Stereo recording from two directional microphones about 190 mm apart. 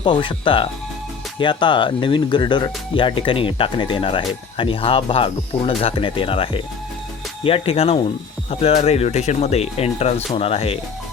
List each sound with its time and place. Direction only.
0.0 s speech: 25° left (ahead or behind)